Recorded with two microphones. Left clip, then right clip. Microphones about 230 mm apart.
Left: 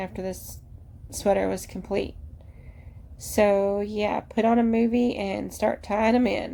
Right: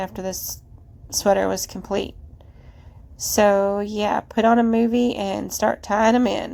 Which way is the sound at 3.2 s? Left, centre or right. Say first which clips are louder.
Right 4 dB; centre.